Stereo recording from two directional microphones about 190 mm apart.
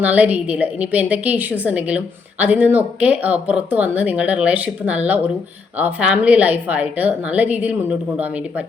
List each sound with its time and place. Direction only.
0.0 s speech: 10° right (ahead or behind)